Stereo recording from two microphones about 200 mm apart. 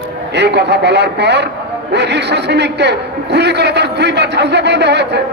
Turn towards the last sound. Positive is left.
turn(degrees=-60)  # may be behind; listen again after turning